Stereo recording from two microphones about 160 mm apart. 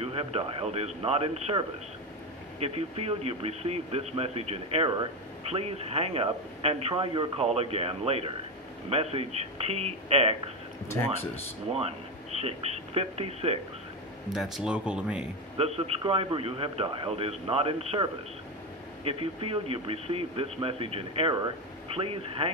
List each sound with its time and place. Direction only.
0.0 s a man's voice: 40° right (ahead or behind)
2.6 s a man's voice: 40° right (ahead or behind)
12.4 s a man's voice: 40° right (ahead or behind)
14.3 s speech: centre (ahead or behind)
15.5 s a man's voice: 40° right (ahead or behind)
19.0 s a man's voice: 35° right (ahead or behind)